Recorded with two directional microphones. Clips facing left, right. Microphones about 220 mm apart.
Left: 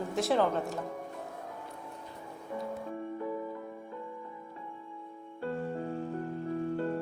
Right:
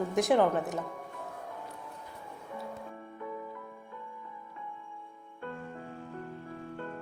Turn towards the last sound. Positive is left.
turn(degrees=35)  # may be behind; listen again after turning